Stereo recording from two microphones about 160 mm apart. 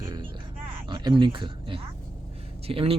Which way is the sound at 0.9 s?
30° right (ahead or behind).